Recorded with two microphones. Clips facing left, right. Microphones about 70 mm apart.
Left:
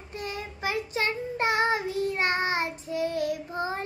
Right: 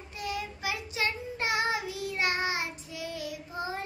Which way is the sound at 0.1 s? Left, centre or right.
Left.